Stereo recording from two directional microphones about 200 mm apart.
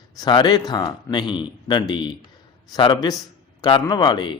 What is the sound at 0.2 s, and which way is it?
A man's voice, 20° left (ahead or behind).